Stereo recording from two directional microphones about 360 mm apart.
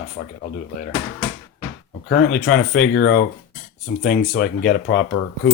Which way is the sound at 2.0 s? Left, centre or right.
Left.